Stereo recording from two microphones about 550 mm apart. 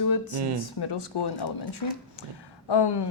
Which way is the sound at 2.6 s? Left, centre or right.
Left.